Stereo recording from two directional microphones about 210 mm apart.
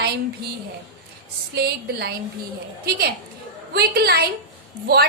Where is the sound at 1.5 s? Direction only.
50° right (ahead or behind).